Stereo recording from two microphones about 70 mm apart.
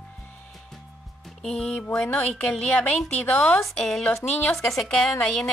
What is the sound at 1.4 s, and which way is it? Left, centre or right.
Speech, centre.